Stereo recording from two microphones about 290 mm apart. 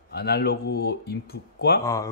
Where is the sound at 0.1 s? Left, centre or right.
Left.